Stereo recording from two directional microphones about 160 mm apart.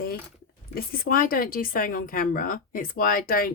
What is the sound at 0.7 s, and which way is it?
Speech, 65° left (ahead or behind).